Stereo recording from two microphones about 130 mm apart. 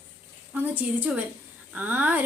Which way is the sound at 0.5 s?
15° right (ahead or behind).